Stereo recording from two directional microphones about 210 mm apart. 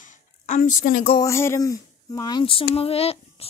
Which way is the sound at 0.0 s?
35° left (ahead or behind).